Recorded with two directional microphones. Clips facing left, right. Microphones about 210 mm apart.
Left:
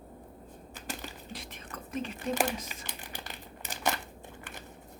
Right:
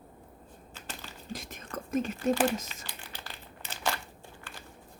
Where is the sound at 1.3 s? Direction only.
45° right (ahead or behind).